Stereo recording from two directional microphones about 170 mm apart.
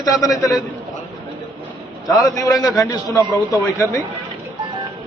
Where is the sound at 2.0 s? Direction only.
20° left (ahead or behind).